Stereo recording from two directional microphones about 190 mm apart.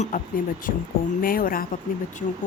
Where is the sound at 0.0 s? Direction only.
45° left (ahead or behind).